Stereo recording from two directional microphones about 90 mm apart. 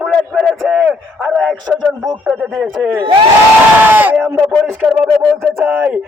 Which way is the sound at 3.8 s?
20° right (ahead or behind).